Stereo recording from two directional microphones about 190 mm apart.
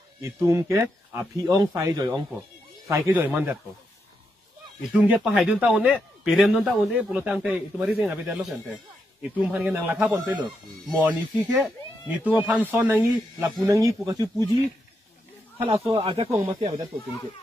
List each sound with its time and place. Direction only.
0.2 s speech: 15° right (ahead or behind)
4.9 s a man's voice: 5° right (ahead or behind)
15.6 s speech: 30° right (ahead or behind)